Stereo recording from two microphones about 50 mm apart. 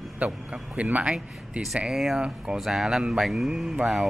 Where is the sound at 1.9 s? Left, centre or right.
Centre.